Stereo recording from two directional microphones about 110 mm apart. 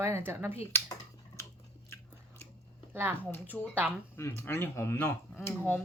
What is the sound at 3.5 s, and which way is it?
Speech, centre (ahead or behind).